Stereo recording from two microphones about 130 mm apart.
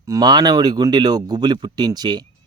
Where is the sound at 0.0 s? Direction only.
30° right (ahead or behind).